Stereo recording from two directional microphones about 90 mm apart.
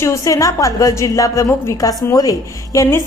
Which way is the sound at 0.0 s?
35° left (ahead or behind).